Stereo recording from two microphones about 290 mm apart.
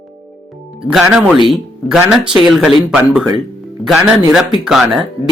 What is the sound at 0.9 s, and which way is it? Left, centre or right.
Speech, centre.